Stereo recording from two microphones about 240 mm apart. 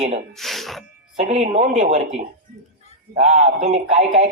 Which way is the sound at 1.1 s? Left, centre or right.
Right.